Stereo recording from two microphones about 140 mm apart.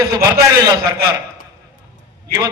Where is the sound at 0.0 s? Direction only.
30° right (ahead or behind).